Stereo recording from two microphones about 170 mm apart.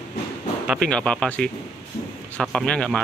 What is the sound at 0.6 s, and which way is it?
A man's voice, centre (ahead or behind).